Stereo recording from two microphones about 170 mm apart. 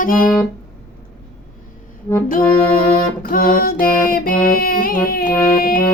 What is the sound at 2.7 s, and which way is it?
Music, 55° left (ahead or behind).